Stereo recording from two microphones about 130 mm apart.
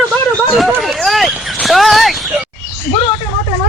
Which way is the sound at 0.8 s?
Centre (ahead or behind).